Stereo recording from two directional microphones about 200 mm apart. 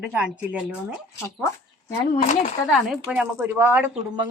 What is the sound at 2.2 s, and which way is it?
Speech, 35° left (ahead or behind).